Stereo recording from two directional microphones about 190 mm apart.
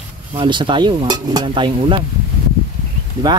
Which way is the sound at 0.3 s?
25° right (ahead or behind).